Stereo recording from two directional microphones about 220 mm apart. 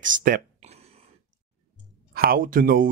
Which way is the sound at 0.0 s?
40° right (ahead or behind).